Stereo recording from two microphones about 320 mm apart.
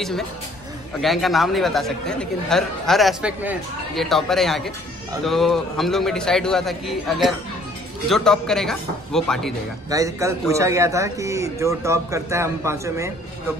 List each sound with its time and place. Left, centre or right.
1.0 s speech: centre
9.8 s speech: centre